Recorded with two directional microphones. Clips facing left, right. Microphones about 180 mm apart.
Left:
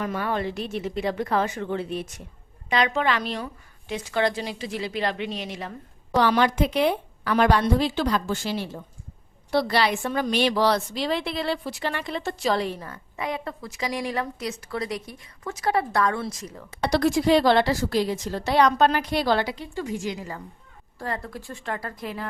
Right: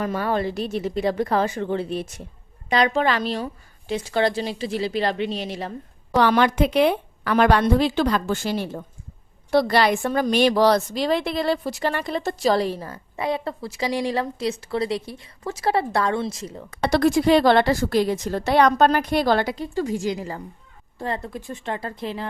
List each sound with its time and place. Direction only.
0.0 s a woman's voice: 35° right (ahead or behind)
6.2 s a woman's voice: 60° right (ahead or behind); by 16.6 s 25° right (ahead or behind)
16.8 s a woman's voice: 55° right (ahead or behind); by 20.4 s 35° right (ahead or behind)
21.0 s speech: 20° right (ahead or behind)